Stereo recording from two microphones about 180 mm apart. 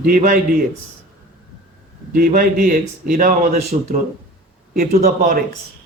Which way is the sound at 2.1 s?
50° right (ahead or behind).